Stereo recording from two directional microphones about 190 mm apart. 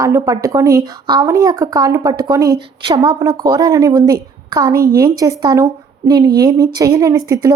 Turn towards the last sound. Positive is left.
turn(degrees=-20)  # may be behind; listen again after turning